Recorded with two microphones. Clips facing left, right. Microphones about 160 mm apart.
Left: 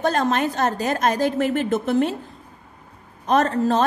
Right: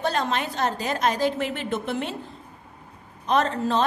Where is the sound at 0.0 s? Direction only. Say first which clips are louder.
Left 5 dB; 45° left (ahead or behind).